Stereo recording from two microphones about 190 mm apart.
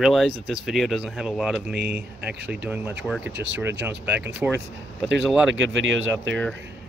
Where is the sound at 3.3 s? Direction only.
65° right (ahead or behind).